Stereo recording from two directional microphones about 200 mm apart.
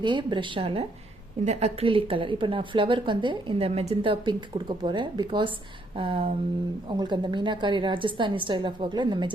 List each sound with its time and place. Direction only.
0.0 s a woman's voice: 25° right (ahead or behind)